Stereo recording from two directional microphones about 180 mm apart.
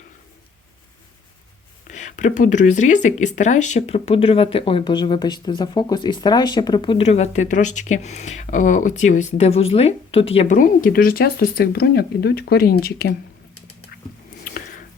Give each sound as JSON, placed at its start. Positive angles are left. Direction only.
{"t": 1.9, "sound": "speech", "side_deg": 40}